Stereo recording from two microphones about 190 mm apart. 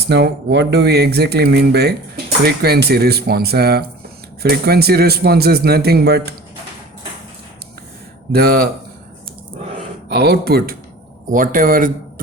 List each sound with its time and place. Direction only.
0.1 s speech: 60° right (ahead or behind)
8.3 s speech: 55° right (ahead or behind)
10.1 s speech: 55° right (ahead or behind)
11.3 s speech: 45° right (ahead or behind)